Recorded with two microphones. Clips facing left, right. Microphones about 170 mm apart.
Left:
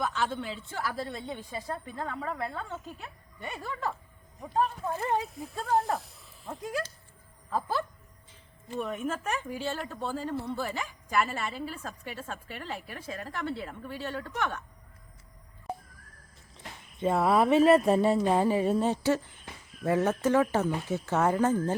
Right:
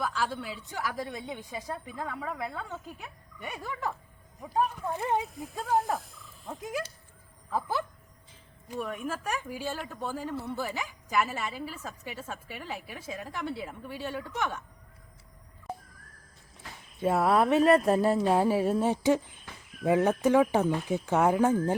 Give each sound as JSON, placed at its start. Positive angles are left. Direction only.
{"t": 0.0, "sound": "a woman's voice", "side_deg": -5}
{"t": 4.4, "sound": "speech", "side_deg": -5}
{"t": 4.9, "sound": "a woman's voice", "side_deg": -15}
{"t": 5.4, "sound": "speech", "side_deg": -5}
{"t": 6.6, "sound": "a woman's voice", "side_deg": -15}
{"t": 8.8, "sound": "speech", "side_deg": 0}
{"t": 9.9, "sound": "a woman's voice", "side_deg": -15}
{"t": 17.0, "sound": "speech", "side_deg": 0}
{"t": 18.9, "sound": "a woman's voice", "side_deg": -15}